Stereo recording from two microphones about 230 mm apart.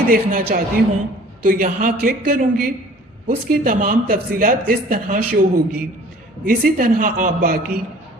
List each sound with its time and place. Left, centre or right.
0.1 s speech: right